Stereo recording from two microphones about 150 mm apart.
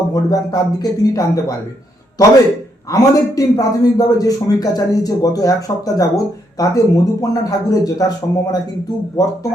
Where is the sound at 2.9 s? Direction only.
25° left (ahead or behind).